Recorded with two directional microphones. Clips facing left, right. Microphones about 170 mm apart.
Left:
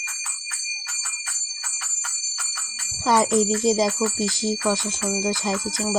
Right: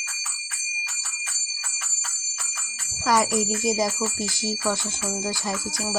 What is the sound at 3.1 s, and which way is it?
Speech, 25° left (ahead or behind).